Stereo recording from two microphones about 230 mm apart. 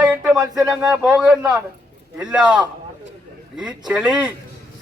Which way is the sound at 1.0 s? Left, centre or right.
Centre.